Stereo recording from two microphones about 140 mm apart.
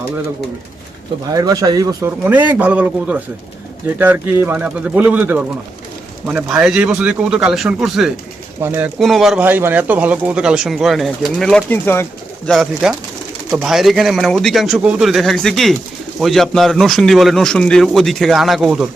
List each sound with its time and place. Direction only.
1.3 s speech: 25° right (ahead or behind)
2.2 s speech: 15° right (ahead or behind)
8.6 s speech: 20° right (ahead or behind)
9.0 s speech: centre (ahead or behind)
9.4 s speech: 15° right (ahead or behind); by 11.6 s centre (ahead or behind)
11.7 s speech: 15° left (ahead or behind)
12.5 s speech: centre (ahead or behind)